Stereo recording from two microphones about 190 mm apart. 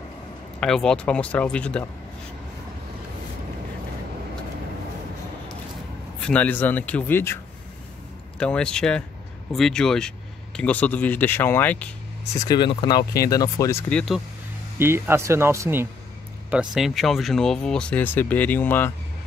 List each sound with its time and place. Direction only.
0.6 s speech: 5° left (ahead or behind)
6.2 s speech: 10° left (ahead or behind)
8.4 s speech: 5° left (ahead or behind)
12.4 s speech: 25° left (ahead or behind); by 14.2 s centre (ahead or behind)
14.8 s speech: 15° right (ahead or behind); by 18.9 s 10° left (ahead or behind)